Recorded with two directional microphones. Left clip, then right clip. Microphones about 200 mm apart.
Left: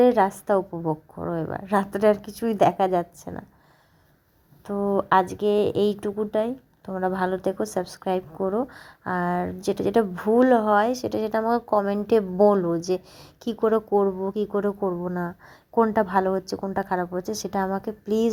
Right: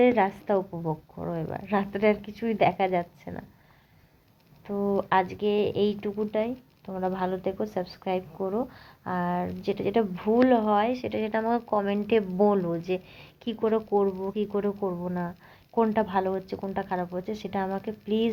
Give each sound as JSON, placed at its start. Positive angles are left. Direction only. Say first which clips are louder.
{"t": 0.0, "sound": "speech", "louder": "left 4 dB", "side_deg": 25}
{"t": 4.6, "sound": "speech", "louder": "left 3 dB", "side_deg": 30}